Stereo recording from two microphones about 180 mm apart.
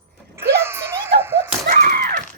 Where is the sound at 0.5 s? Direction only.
15° right (ahead or behind).